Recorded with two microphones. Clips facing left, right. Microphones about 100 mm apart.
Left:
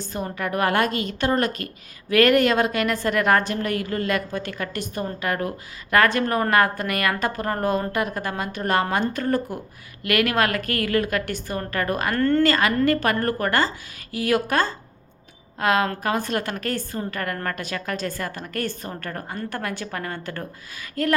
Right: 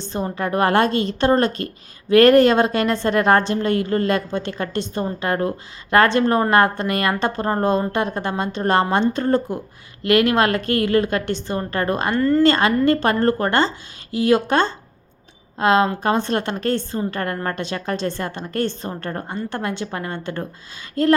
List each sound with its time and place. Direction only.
0.0 s a woman's voice: 30° right (ahead or behind)